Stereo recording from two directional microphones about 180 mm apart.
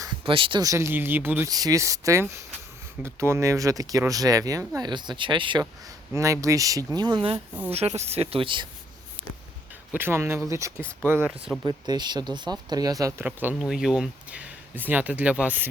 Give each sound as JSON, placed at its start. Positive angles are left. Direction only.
{"t": 0.3, "sound": "speech", "side_deg": -30}
{"t": 7.3, "sound": "speech", "side_deg": -10}
{"t": 7.7, "sound": "speech", "side_deg": -35}
{"t": 9.9, "sound": "speech", "side_deg": -10}
{"t": 11.6, "sound": "speech", "side_deg": -25}